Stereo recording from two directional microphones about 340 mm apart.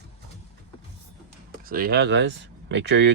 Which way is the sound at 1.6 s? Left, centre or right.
Right.